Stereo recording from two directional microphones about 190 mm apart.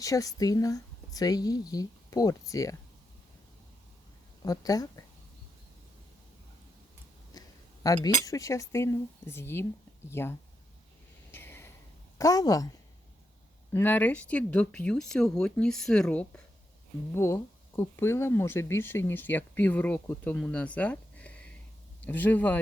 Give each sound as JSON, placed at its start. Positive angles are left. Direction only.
{"t": 0.0, "sound": "a woman's voice", "side_deg": 15}
{"t": 4.4, "sound": "a woman's voice", "side_deg": 20}
{"t": 7.3, "sound": "a sound", "side_deg": 20}
{"t": 7.9, "sound": "speech", "side_deg": 20}
{"t": 11.3, "sound": "a sound", "side_deg": 10}
{"t": 12.1, "sound": "a woman's voice", "side_deg": 20}
{"t": 13.7, "sound": "speech", "side_deg": 10}